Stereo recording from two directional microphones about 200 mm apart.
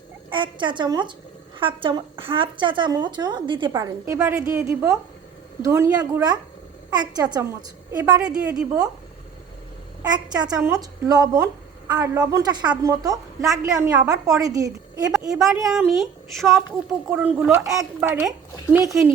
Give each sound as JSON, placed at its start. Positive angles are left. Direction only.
{"t": 0.3, "sound": "a woman's voice", "side_deg": -25}
{"t": 7.9, "sound": "a woman's voice", "side_deg": -10}
{"t": 10.0, "sound": "a woman's voice", "side_deg": -20}
{"t": 15.4, "sound": "a woman's voice", "side_deg": 0}